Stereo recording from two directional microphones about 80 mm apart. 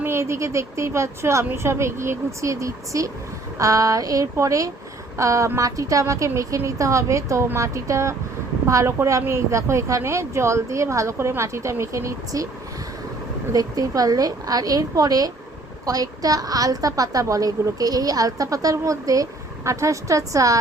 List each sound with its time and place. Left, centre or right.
0.0 s a woman's voice: right
13.5 s a woman's voice: right